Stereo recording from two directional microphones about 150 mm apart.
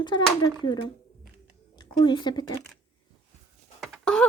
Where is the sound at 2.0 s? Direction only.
30° left (ahead or behind).